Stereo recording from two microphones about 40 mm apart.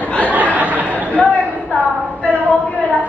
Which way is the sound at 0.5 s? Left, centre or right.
Right.